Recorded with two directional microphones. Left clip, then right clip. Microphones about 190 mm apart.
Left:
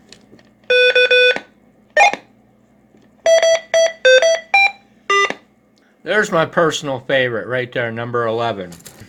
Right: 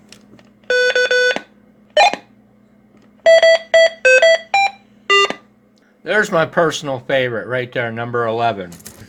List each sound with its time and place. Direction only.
0.7 s a sound: 20° left (ahead or behind)
1.9 s pulse: 20° left (ahead or behind)
3.2 s alarm: 20° left (ahead or behind)
6.0 s speech: centre (ahead or behind)